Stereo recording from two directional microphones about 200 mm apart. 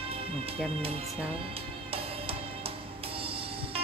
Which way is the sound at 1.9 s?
30° right (ahead or behind).